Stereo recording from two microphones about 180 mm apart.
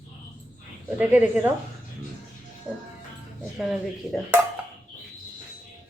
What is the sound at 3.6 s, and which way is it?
Speech, 5° right (ahead or behind).